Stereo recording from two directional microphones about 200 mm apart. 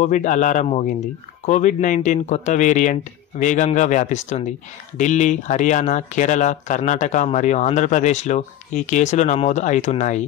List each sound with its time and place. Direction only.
0.0 s speech: 35° left (ahead or behind)